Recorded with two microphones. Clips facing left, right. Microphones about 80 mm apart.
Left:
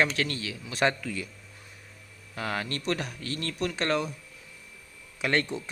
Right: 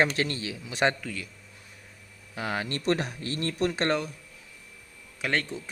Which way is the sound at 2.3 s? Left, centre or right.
Centre.